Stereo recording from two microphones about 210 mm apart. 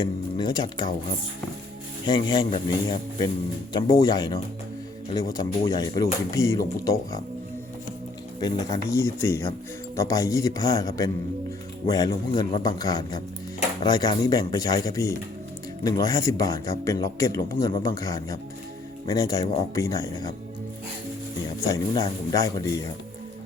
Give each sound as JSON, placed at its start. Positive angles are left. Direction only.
{"t": 0.0, "sound": "speech", "side_deg": 20}
{"t": 2.0, "sound": "a man's voice", "side_deg": 20}
{"t": 8.4, "sound": "a man's voice", "side_deg": 20}
{"t": 21.6, "sound": "speech", "side_deg": 15}